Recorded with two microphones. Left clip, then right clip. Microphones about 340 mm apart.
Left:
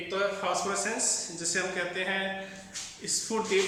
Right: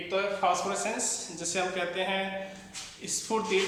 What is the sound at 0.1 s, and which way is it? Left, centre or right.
A man's voice, centre.